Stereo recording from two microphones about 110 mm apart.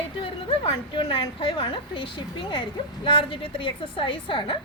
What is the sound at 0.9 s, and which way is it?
A woman's voice, 50° left (ahead or behind).